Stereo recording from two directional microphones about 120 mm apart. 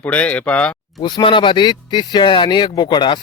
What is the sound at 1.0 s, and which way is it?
Speech, 40° left (ahead or behind).